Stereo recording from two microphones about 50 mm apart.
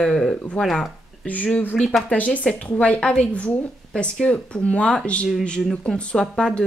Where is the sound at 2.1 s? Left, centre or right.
Left.